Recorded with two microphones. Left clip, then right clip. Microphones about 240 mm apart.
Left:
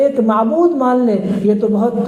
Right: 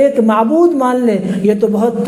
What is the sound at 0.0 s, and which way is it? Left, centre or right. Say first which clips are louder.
A man's voice: right 2 dB; right.